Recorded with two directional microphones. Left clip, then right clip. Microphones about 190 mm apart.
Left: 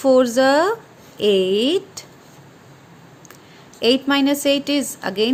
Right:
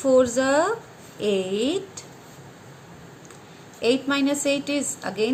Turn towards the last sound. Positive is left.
turn(degrees=45)  # may be behind; listen again after turning